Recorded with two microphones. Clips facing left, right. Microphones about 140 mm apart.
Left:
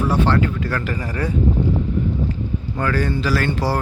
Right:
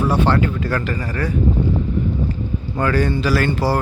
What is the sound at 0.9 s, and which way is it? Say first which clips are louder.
Speech: right 1 dB; 15° left (ahead or behind).